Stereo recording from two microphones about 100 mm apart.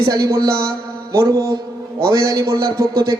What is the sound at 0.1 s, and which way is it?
A man's voice, 35° right (ahead or behind).